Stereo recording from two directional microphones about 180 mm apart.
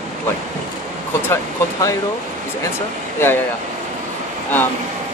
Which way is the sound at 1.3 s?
15° left (ahead or behind).